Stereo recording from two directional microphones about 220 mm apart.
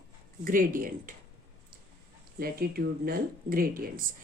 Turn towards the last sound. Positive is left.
turn(degrees=-40)  # may be behind; listen again after turning